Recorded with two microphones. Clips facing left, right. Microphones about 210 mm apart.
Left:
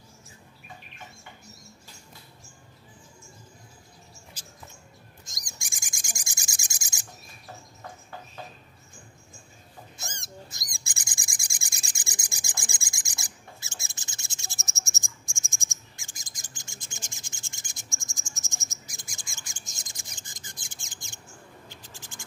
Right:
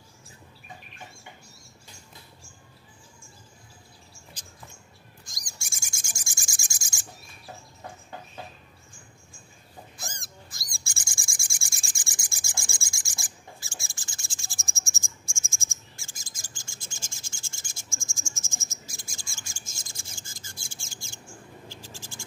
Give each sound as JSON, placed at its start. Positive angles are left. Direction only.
{"t": 5.2, "sound": "bird", "side_deg": 20}
{"t": 9.9, "sound": "owl", "side_deg": 25}
{"t": 21.6, "sound": "scratch", "side_deg": 20}